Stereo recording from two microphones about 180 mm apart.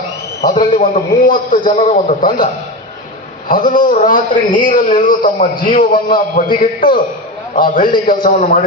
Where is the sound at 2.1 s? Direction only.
45° left (ahead or behind).